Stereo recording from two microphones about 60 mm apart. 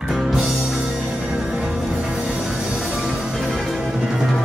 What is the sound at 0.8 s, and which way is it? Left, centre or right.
Music, centre.